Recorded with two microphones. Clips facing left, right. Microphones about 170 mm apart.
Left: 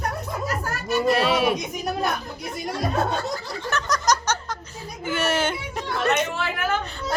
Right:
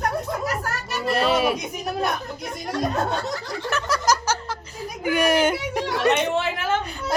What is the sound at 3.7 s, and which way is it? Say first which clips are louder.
Laughter: even; 10° right (ahead or behind).